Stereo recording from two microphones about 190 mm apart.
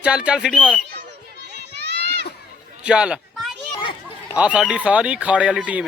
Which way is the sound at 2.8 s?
5° right (ahead or behind).